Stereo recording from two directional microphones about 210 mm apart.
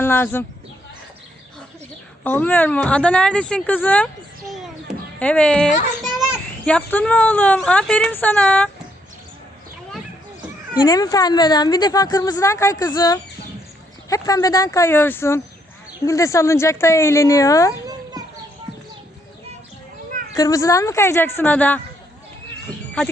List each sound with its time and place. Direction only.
0.0 s speech: 10° left (ahead or behind)
2.2 s speech: 10° left (ahead or behind)
6.0 s children playing: centre (ahead or behind)
6.7 s a woman's voice: 5° left (ahead or behind)
10.8 s a woman's voice: 20° left (ahead or behind)
20.3 s a woman's voice: 15° left (ahead or behind)